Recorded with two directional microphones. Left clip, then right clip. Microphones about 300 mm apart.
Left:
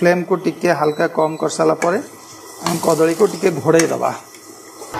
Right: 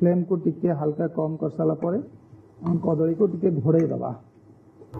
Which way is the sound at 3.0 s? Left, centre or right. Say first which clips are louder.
Left 5 dB; centre.